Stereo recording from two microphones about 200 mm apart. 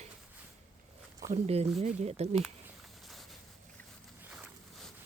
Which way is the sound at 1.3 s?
35° right (ahead or behind).